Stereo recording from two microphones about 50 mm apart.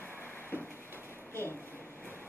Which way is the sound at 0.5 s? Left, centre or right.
Left.